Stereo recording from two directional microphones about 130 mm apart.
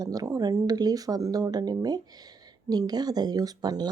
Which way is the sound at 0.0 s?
30° right (ahead or behind).